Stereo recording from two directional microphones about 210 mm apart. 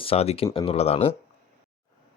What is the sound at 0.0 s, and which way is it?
Speech, 30° left (ahead or behind).